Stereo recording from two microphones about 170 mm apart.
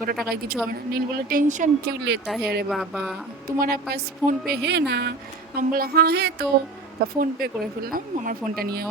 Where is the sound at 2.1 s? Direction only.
90° right.